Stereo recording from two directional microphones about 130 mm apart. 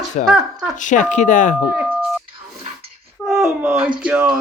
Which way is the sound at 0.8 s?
75° left (ahead or behind).